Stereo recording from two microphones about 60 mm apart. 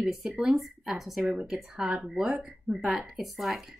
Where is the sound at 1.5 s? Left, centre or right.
Centre.